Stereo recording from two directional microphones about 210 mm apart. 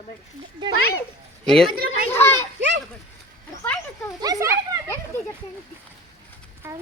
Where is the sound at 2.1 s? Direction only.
10° left (ahead or behind).